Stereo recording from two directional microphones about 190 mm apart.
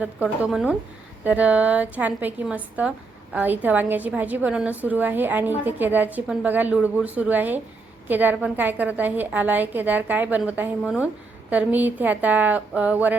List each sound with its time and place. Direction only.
0.0 s a woman's voice: 10° right (ahead or behind)